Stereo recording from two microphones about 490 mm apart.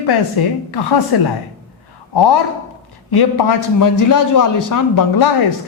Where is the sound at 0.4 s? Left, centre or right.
Left.